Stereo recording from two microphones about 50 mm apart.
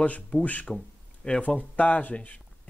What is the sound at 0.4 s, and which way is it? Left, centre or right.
Speech, left.